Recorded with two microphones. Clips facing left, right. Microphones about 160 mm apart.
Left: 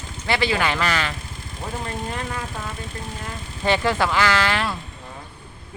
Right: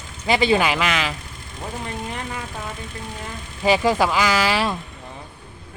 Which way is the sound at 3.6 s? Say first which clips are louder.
Right 3 dB; 10° right (ahead or behind).